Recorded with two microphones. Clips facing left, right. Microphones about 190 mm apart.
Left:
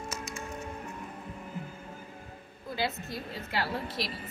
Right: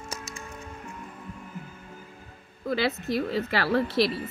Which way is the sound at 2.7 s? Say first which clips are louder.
Right 7 dB; 80° right.